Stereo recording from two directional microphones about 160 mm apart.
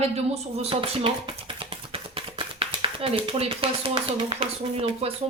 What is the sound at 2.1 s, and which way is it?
Speech, 35° right (ahead or behind).